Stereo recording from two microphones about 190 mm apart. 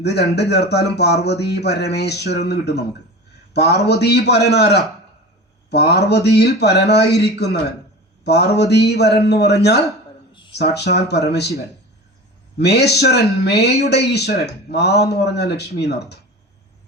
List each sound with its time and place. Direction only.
0.0 s a man's voice: 60° left (ahead or behind)